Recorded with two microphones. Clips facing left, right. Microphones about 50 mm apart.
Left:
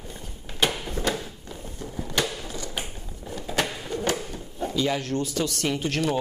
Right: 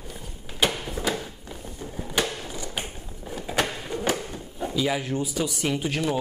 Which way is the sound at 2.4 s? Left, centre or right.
Centre.